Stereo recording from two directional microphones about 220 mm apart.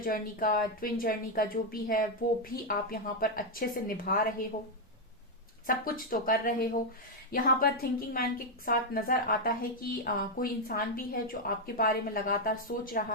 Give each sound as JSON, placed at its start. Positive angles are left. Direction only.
{"t": 0.0, "sound": "a woman's voice", "side_deg": 40}
{"t": 5.6, "sound": "a woman's voice", "side_deg": 40}